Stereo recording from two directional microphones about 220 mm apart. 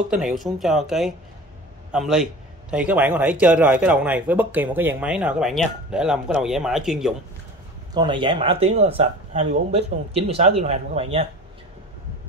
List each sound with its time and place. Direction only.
0.1 s speech: centre (ahead or behind)
7.9 s speech: 20° right (ahead or behind)